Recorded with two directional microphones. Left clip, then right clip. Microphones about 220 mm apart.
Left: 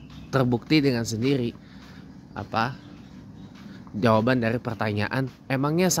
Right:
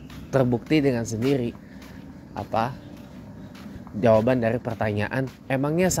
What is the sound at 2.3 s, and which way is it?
Speech, 20° left (ahead or behind).